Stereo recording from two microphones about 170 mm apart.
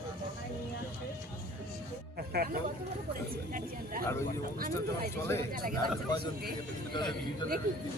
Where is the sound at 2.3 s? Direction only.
70° right (ahead or behind).